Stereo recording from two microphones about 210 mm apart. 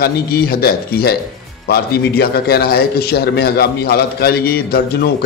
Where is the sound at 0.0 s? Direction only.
45° left (ahead or behind).